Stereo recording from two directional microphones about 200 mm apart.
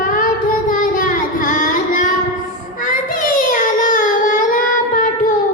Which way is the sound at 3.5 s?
45° left (ahead or behind).